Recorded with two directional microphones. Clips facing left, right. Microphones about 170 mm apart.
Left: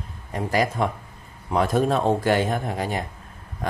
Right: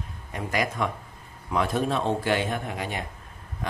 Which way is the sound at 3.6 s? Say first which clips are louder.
Left 5 dB; 45° left (ahead or behind).